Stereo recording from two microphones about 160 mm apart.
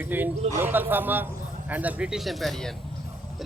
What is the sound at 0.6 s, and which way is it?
A man's voice, 10° right (ahead or behind).